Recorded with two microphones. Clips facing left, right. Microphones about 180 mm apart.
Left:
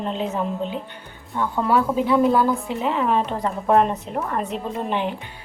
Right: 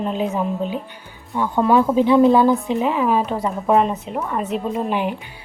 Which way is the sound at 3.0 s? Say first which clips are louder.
Right 2 dB; 5° right (ahead or behind).